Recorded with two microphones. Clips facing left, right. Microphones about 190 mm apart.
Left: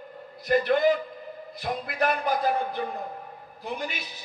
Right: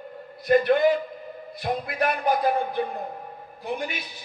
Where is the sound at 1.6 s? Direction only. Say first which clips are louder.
Right 2 dB; 55° right (ahead or behind).